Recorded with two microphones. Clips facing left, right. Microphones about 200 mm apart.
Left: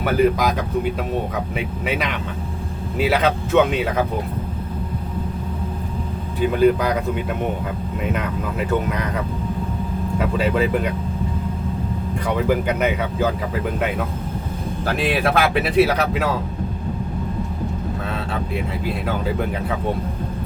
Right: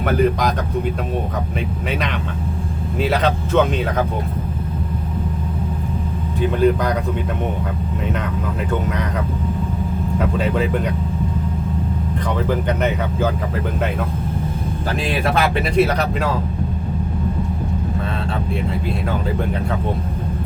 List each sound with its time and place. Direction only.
0.0 s speech: 5° left (ahead or behind)
1.5 s speech: 5° left (ahead or behind)
6.6 s speech: 5° left (ahead or behind)
10.3 s speech: 5° left (ahead or behind)
12.5 s speech: 10° left (ahead or behind)
14.9 s speech: centre (ahead or behind)